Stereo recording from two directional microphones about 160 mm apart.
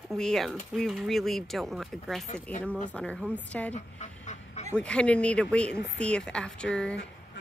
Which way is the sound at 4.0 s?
45° left (ahead or behind).